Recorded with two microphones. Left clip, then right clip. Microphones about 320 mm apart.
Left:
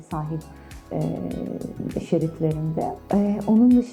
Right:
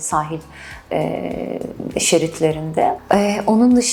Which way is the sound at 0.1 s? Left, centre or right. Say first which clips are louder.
Right 12 dB; centre.